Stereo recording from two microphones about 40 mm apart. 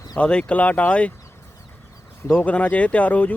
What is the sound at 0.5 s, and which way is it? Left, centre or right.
Speech, left.